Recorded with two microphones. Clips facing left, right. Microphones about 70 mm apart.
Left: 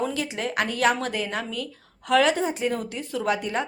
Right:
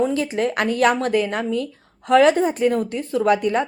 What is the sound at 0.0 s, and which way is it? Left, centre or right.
A woman's voice, right.